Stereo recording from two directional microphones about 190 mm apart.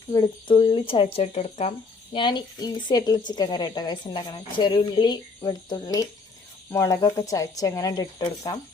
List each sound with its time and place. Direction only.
0.1 s a woman's voice: 25° left (ahead or behind)
2.1 s a woman's voice: 25° left (ahead or behind)